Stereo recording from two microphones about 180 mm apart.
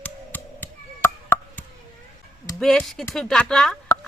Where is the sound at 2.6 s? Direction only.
Centre (ahead or behind).